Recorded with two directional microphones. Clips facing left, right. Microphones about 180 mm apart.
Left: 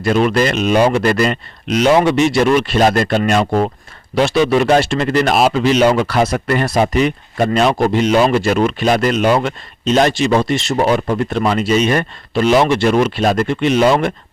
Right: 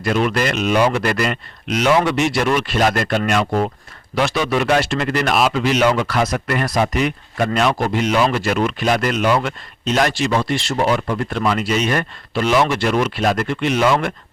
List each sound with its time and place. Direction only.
0.0 s speech: 30° left (ahead or behind)